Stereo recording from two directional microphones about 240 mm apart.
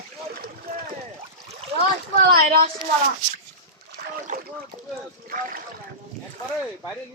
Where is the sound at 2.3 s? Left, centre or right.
Right.